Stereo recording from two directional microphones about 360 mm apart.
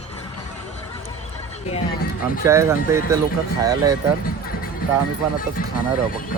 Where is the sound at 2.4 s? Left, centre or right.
Centre.